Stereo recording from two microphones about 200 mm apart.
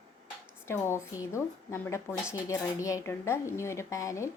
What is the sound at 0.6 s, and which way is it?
Speech, 10° left (ahead or behind).